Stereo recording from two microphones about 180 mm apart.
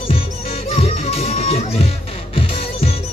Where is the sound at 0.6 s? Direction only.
35° left (ahead or behind).